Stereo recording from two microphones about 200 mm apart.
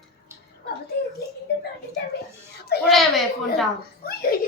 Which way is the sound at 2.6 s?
55° left (ahead or behind).